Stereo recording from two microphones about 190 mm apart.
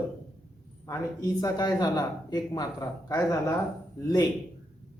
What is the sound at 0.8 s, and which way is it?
A man's voice, 20° left (ahead or behind).